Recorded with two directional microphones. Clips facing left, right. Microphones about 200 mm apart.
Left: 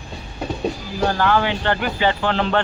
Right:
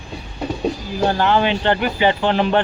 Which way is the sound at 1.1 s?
20° right (ahead or behind).